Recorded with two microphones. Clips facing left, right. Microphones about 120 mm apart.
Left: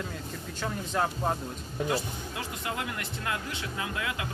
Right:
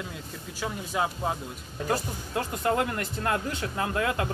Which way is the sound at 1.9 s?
45° right (ahead or behind).